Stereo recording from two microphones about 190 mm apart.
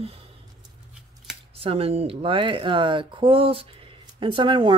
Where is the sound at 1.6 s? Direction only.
30° right (ahead or behind).